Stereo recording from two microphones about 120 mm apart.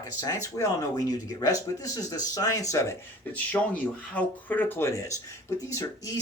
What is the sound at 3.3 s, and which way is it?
Speech, 10° left (ahead or behind).